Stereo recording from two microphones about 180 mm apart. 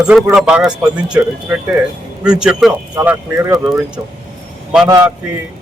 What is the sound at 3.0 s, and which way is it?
Speech, 15° right (ahead or behind).